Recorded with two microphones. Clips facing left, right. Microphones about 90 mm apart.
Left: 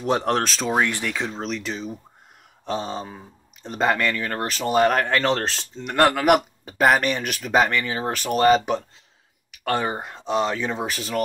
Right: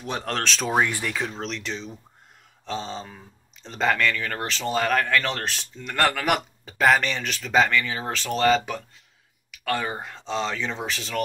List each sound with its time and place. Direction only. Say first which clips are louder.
0.0 s speech: left 8 dB; 35° left (ahead or behind)
0.4 s speech: left 1 dB; 5° left (ahead or behind)
2.6 s speech: left 4 dB; 15° left (ahead or behind); by 5.9 s 30° left (ahead or behind)
5.9 s speech: left 5 dB; 20° left (ahead or behind)